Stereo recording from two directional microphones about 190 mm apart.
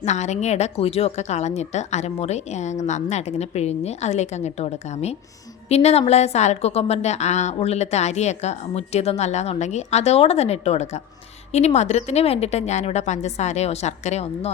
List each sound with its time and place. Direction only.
0.0 s a woman's voice: 35° left (ahead or behind)